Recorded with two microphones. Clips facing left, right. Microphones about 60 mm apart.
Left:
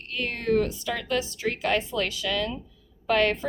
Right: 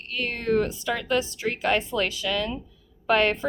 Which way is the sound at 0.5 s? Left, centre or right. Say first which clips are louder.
Right 1 dB; right.